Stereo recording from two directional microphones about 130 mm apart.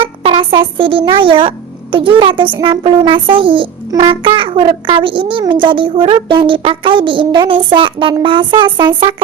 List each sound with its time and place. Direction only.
0.0 s a child's voice: 45° right (ahead or behind)